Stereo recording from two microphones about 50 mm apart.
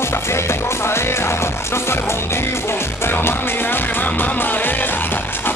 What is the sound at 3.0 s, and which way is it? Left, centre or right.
Music, left.